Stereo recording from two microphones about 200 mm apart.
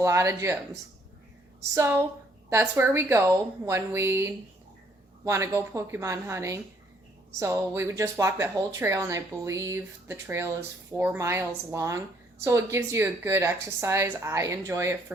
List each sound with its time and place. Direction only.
0.0 s a woman's voice: 15° right (ahead or behind)